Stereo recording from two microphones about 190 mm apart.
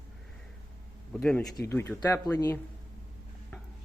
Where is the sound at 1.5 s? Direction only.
15° left (ahead or behind).